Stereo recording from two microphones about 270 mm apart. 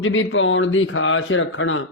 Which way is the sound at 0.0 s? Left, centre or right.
Left.